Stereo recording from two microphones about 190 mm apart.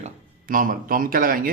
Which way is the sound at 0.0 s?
45° right (ahead or behind).